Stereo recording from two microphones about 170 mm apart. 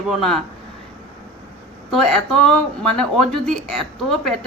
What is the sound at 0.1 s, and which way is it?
Speech, centre (ahead or behind).